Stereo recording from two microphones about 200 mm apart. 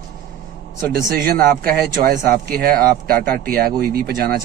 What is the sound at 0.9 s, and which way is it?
Speech, 50° right (ahead or behind).